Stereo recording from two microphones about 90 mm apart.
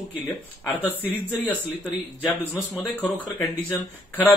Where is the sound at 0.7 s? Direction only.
15° left (ahead or behind).